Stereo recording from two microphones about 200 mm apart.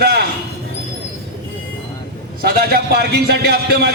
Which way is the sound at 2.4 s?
50° right (ahead or behind).